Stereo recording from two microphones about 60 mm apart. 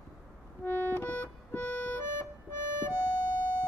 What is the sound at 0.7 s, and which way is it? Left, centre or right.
Music, left.